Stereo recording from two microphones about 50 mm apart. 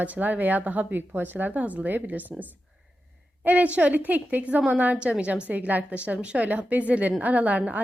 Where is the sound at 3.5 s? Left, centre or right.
Right.